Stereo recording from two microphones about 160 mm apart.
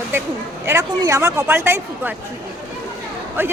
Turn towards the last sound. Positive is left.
turn(degrees=-15)  # may be behind; listen again after turning